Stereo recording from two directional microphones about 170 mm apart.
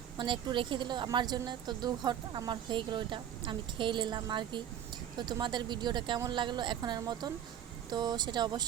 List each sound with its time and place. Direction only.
0.2 s a woman's voice: 30° right (ahead or behind)